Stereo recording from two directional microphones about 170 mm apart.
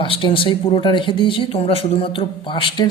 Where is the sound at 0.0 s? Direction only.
30° left (ahead or behind).